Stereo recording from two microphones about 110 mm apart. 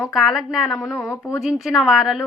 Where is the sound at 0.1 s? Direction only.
5° right (ahead or behind).